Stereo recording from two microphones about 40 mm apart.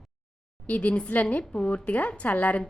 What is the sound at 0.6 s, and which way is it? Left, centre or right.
A woman's voice, left.